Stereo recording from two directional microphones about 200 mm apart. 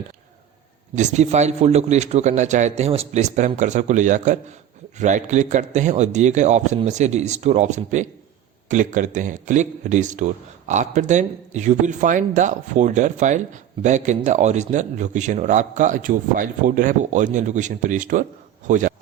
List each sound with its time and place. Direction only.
0.9 s speech: 35° right (ahead or behind)